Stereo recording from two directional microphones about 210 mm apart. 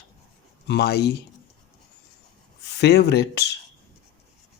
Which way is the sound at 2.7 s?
50° left (ahead or behind).